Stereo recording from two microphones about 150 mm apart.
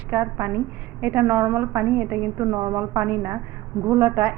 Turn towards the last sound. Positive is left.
turn(degrees=-20)  # may be behind; listen again after turning